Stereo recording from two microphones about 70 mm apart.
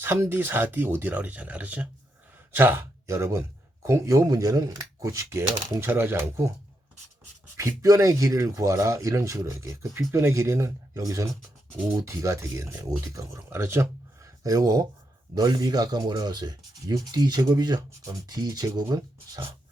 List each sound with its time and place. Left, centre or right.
0.0 s speech: right
2.6 s speech: right
7.5 s speech: right
10.1 s speech: right
13.5 s speech: right
14.4 s speech: right
15.4 s speech: right
18.0 s speech: right